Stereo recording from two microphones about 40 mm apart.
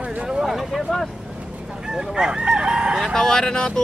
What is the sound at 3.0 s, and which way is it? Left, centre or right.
Speech, centre.